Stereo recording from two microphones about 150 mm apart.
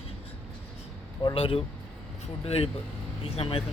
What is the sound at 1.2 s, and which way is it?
A man's voice, 35° left (ahead or behind).